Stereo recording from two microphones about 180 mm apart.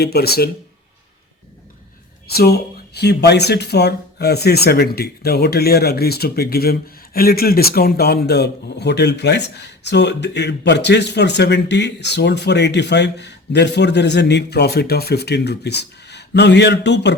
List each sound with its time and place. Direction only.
0.0 s speech: 60° left (ahead or behind)
2.2 s speech: 60° left (ahead or behind)